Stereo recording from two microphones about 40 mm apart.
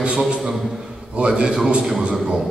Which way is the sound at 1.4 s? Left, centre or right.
Centre.